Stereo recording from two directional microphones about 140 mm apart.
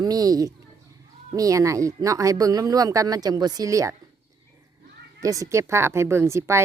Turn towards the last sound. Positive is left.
turn(degrees=-20)  # may be behind; listen again after turning